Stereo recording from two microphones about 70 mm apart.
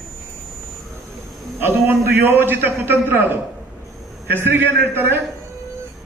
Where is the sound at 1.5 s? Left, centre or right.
Right.